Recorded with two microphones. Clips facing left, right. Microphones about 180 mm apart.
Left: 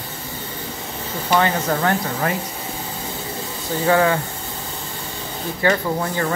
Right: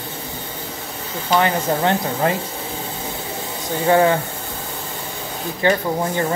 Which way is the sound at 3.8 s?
25° right (ahead or behind).